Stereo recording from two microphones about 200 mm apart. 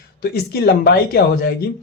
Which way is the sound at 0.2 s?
50° left (ahead or behind).